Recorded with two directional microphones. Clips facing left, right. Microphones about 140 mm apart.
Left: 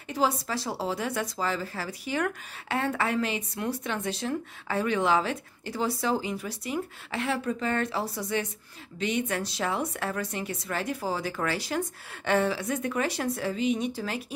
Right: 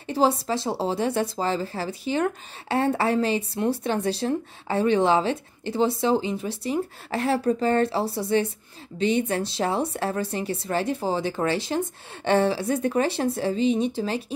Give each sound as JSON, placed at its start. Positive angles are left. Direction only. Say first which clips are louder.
{"t": 0.0, "sound": "a woman's voice", "louder": "right 5 dB", "side_deg": -30}